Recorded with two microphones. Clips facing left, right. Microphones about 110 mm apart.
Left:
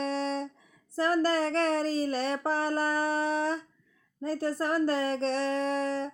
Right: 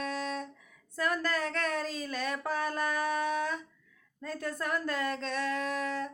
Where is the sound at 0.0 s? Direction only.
35° left (ahead or behind).